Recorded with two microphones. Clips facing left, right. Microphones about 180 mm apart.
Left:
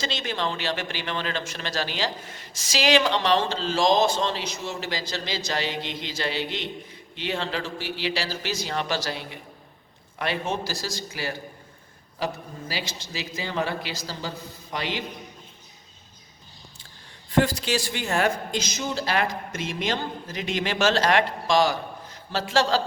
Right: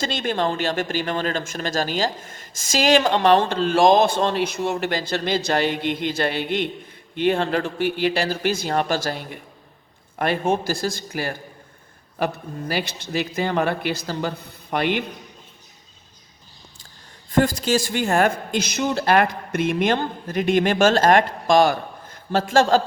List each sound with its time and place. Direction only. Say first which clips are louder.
0.0 s speech: right 6 dB; 50° right (ahead or behind)
17.3 s speech: right 4 dB; 45° right (ahead or behind)